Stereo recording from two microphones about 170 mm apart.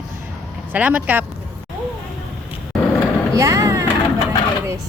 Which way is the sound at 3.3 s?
20° right (ahead or behind).